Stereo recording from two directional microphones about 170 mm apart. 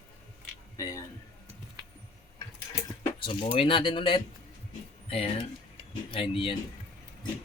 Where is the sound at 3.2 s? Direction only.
30° left (ahead or behind).